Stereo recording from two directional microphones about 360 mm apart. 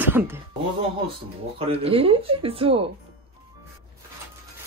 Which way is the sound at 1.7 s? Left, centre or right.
Centre.